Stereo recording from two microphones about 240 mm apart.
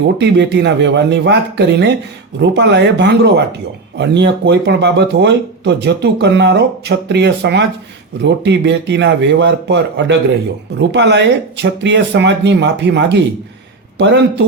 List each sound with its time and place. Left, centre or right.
0.2 s speech: right